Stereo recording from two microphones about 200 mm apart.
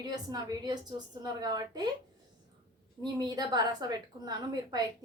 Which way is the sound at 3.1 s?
20° right (ahead or behind).